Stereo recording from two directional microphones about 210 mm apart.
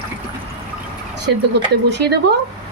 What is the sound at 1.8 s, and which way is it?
Speech, 55° right (ahead or behind).